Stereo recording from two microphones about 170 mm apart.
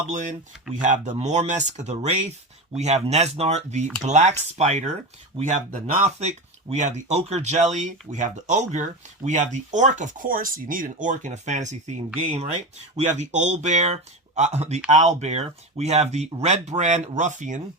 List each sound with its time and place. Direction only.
0.1 s speech: 45° right (ahead or behind)